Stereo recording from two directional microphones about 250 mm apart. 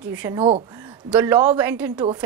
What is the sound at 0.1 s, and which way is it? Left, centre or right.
Speech, centre.